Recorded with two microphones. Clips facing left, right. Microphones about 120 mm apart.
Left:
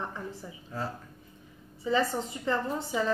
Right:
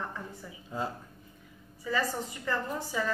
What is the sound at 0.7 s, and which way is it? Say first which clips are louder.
Speech: right 1 dB; 20° right (ahead or behind).